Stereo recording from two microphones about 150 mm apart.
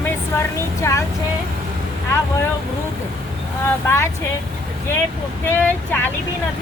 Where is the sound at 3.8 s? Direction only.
15° left (ahead or behind).